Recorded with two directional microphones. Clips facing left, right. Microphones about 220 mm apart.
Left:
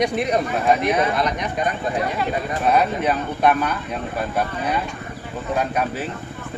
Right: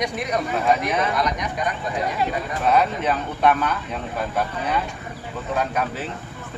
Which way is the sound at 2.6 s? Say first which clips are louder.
Left 1 dB; 10° left (ahead or behind).